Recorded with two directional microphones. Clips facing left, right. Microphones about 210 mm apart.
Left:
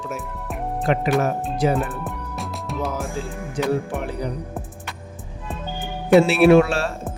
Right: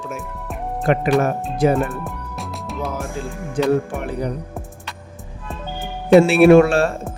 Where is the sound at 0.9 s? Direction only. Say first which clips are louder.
Right 3 dB; 55° right (ahead or behind).